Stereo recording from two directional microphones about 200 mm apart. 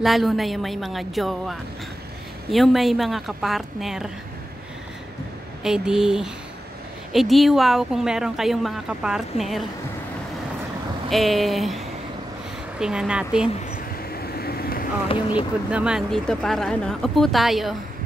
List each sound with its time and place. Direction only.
0.0 s speech: centre (ahead or behind)
5.6 s speech: 5° right (ahead or behind)
11.1 s speech: centre (ahead or behind)
14.1 s vehicle: 50° left (ahead or behind)
15.7 s speech: 5° right (ahead or behind)